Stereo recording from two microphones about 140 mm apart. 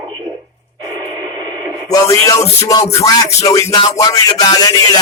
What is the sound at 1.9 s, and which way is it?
Music, 25° left (ahead or behind).